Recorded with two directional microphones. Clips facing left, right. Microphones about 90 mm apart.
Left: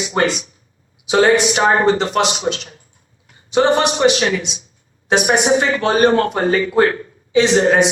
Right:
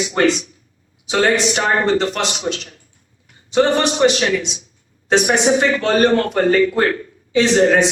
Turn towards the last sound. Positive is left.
turn(degrees=20)  # may be behind; listen again after turning